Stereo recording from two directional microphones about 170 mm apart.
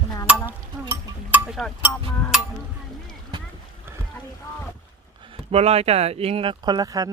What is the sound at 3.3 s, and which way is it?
Boat, 25° right (ahead or behind).